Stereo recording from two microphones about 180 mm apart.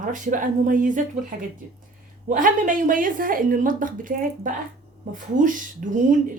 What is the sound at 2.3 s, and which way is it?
A woman's voice, 50° right (ahead or behind).